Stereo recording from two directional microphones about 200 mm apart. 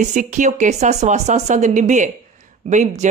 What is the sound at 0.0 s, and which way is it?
Speech, 40° right (ahead or behind).